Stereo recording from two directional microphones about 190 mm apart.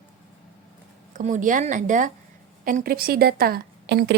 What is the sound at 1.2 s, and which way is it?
A woman's voice, 40° right (ahead or behind).